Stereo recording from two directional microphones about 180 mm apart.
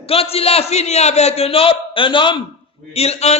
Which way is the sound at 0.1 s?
35° left (ahead or behind).